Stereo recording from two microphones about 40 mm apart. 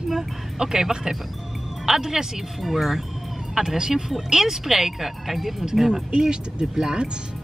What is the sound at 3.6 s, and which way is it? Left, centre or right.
Speech, centre.